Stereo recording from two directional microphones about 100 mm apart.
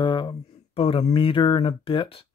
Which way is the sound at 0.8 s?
70° left (ahead or behind).